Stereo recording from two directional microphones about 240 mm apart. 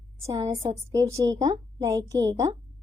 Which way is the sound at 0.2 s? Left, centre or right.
Centre.